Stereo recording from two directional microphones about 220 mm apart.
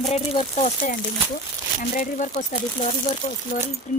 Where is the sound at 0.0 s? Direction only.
30° left (ahead or behind).